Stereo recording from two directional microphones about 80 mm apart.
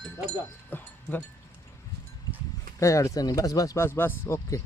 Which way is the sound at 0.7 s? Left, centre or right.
Left.